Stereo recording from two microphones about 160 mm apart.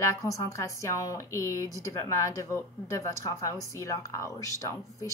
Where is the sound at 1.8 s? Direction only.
20° left (ahead or behind).